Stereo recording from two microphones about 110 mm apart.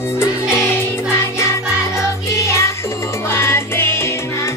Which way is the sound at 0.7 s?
20° left (ahead or behind).